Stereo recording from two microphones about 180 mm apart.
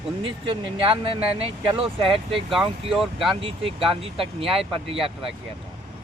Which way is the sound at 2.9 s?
Centre (ahead or behind).